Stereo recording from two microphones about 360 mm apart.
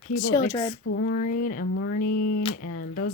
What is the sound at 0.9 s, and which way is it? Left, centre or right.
Speech, left.